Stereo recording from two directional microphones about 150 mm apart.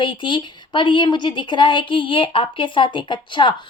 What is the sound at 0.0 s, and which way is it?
A woman's voice, 30° left (ahead or behind).